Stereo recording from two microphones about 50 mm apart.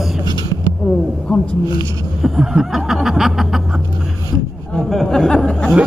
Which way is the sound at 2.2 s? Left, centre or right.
Centre.